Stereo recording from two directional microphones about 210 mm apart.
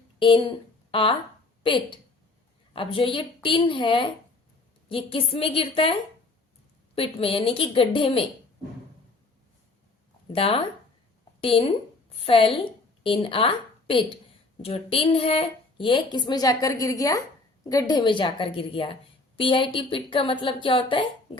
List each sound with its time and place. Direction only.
0.2 s a woman's voice: 25° left (ahead or behind)
10.3 s a woman's voice: 25° left (ahead or behind)